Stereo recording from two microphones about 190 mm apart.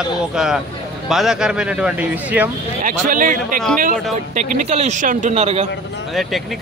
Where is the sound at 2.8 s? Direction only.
45° right (ahead or behind).